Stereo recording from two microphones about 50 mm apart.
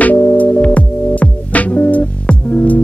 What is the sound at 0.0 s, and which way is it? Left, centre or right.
Music, left.